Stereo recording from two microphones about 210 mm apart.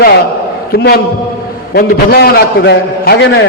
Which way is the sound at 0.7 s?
50° left (ahead or behind).